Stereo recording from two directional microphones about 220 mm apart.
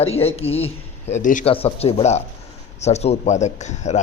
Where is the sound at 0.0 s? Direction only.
25° left (ahead or behind).